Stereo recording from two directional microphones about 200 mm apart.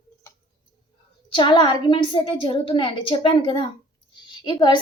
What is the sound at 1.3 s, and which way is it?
A woman's voice, 25° left (ahead or behind).